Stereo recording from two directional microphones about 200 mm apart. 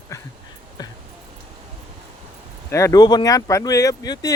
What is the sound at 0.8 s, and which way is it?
Music, 20° left (ahead or behind).